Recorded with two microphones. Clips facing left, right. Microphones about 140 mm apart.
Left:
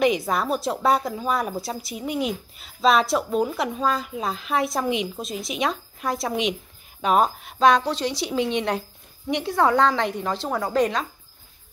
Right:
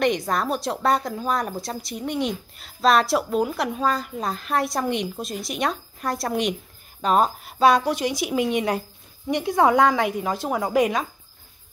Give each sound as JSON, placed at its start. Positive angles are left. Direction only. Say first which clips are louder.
{"t": 0.0, "sound": "a woman's voice", "louder": "left 1 dB", "side_deg": 5}